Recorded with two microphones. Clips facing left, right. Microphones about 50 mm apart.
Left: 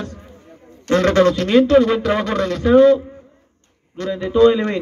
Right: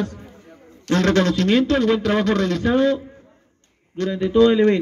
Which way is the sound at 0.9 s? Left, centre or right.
Left.